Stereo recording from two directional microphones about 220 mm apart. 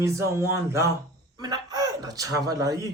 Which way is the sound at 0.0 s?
15° right (ahead or behind).